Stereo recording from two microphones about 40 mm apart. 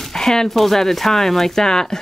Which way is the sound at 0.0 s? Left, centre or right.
Centre.